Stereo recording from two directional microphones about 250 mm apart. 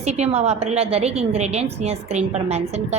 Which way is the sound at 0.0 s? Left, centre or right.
Right.